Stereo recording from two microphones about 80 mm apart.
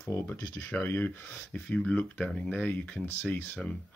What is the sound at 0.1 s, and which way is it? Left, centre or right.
Speech, left.